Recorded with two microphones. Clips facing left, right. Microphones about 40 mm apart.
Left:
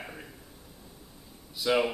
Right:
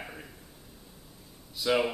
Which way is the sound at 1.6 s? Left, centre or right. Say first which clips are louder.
Left 1 dB; centre.